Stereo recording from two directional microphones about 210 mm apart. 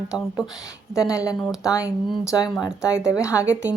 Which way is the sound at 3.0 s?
15° left (ahead or behind).